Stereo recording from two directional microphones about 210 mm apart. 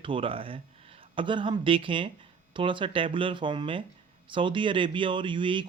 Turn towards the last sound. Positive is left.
turn(degrees=-25)  # may be behind; listen again after turning